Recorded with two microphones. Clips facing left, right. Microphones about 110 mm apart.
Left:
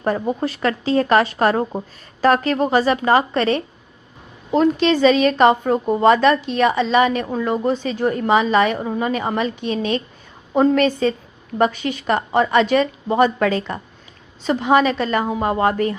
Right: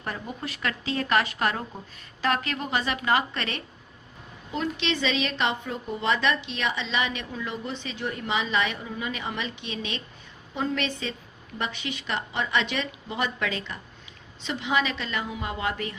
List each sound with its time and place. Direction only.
0.0 s a woman's voice: 35° left (ahead or behind)